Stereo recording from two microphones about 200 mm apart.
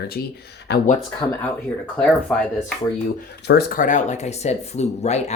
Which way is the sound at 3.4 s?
55° left (ahead or behind).